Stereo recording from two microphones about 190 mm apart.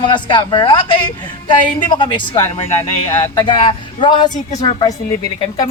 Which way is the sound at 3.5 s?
25° left (ahead or behind).